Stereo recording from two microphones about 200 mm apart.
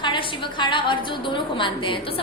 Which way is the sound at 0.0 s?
25° left (ahead or behind).